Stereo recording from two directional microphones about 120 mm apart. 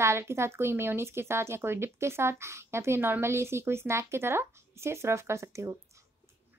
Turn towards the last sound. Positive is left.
turn(degrees=-25)  # may be behind; listen again after turning